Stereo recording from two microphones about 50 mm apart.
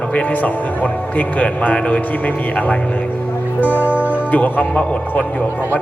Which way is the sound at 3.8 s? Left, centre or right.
Right.